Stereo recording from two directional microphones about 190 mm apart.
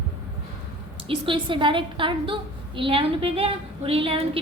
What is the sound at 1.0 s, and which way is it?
A woman's voice, 30° right (ahead or behind).